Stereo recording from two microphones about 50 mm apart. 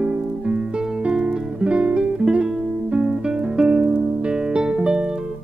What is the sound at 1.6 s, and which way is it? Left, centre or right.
Music, right.